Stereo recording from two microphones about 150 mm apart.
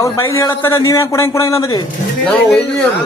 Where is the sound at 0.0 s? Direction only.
20° left (ahead or behind).